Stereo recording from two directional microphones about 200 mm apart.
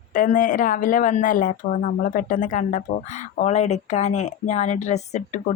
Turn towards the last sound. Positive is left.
turn(degrees=35)  # may be behind; listen again after turning